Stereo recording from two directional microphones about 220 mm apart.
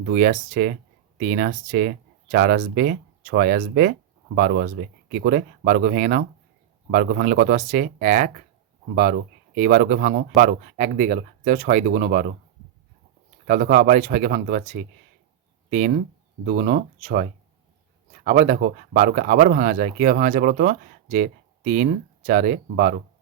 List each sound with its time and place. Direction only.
0.0 s speech: 40° right (ahead or behind)
13.5 s speech: 40° right (ahead or behind)